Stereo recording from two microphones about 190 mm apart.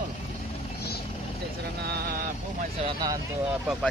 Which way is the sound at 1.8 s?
55° right (ahead or behind).